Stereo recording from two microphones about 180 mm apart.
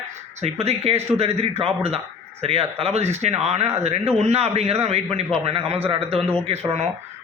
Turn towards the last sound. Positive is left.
turn(degrees=-35)  # may be behind; listen again after turning